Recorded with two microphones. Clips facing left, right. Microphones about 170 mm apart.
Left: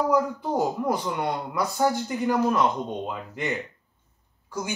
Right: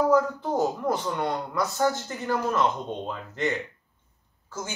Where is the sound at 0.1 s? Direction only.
15° left (ahead or behind).